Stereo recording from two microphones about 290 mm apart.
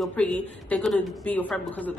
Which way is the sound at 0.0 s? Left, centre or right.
Centre.